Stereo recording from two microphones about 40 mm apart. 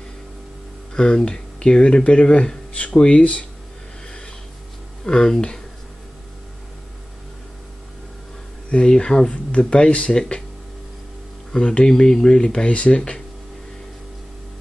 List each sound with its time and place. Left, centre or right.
0.9 s speech: left
3.1 s speech: left
5.0 s speech: centre
8.6 s speech: left
11.5 s speech: left